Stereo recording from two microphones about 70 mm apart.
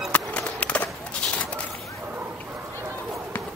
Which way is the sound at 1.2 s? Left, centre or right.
Centre.